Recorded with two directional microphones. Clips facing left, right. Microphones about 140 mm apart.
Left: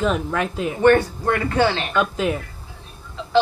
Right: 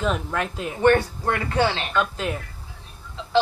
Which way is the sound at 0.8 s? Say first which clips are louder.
Left 3 dB; 25° right (ahead or behind).